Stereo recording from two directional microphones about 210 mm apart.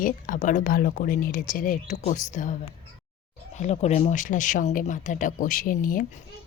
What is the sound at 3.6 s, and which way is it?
Speech, 30° left (ahead or behind).